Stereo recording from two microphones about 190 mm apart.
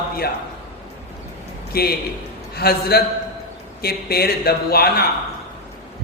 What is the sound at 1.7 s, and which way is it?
A man's voice, 55° left (ahead or behind).